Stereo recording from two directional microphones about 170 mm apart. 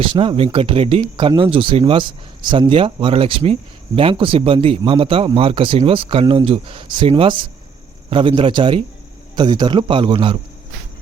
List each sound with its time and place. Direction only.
0.0 s a man's voice: 30° right (ahead or behind)